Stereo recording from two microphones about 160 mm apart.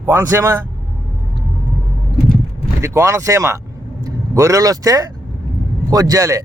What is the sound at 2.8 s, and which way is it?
Speech, 15° right (ahead or behind).